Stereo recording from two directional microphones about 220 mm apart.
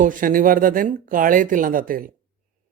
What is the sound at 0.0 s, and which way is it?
Speech, 40° right (ahead or behind).